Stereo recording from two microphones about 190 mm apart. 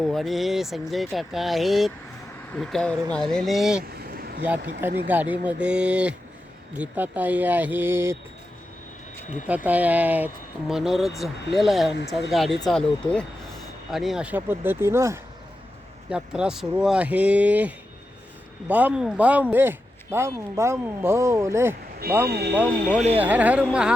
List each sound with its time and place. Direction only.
0.0 s speech: centre (ahead or behind)
3.9 s a sound: 55° right (ahead or behind)
5.0 s speech: 10° right (ahead or behind)
9.6 s speech: 10° right (ahead or behind)
22.3 s speech: 60° right (ahead or behind)
22.5 s speech: 5° right (ahead or behind)